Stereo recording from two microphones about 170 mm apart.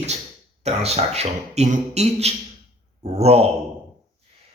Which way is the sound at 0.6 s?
40° right (ahead or behind).